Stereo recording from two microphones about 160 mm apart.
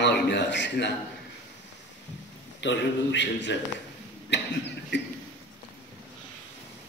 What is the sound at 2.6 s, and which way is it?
Speech, 90° left.